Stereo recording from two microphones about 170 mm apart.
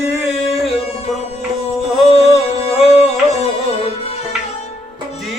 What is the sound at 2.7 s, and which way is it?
Music, 40° left (ahead or behind).